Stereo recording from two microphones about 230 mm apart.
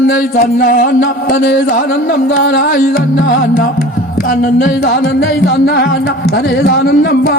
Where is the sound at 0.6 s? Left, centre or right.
Left.